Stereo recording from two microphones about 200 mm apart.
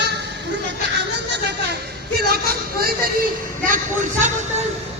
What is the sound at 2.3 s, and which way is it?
Speech, 50° right (ahead or behind).